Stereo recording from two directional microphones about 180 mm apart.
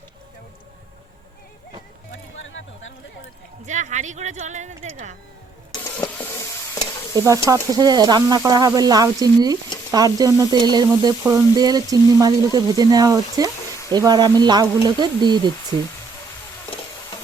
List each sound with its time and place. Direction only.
2.4 s a sound: 90° left
3.7 s speech: 40° right (ahead or behind)
5.8 s printer: 15° left (ahead or behind)
7.1 s speech: 20° right (ahead or behind)